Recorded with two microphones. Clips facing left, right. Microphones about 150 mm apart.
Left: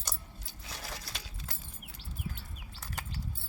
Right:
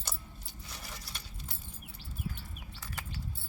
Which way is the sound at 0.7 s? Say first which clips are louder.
Left 4 dB; 90° left.